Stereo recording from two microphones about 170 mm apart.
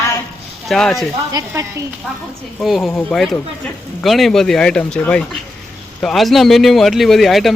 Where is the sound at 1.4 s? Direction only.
25° right (ahead or behind).